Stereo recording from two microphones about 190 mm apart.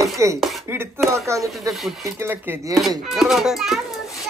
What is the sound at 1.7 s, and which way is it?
Speech, centre (ahead or behind).